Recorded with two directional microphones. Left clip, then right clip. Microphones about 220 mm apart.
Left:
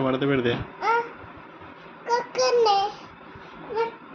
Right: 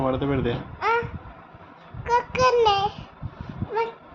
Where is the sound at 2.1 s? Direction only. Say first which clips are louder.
Right 2 dB; 30° right (ahead or behind).